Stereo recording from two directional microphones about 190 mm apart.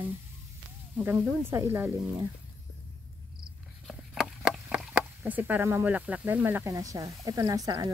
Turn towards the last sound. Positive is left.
turn(degrees=-20)  # may be behind; listen again after turning